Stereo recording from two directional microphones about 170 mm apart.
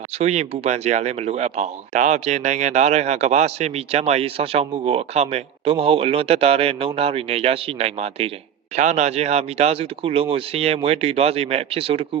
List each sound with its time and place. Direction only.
0.2 s speech: 40° right (ahead or behind)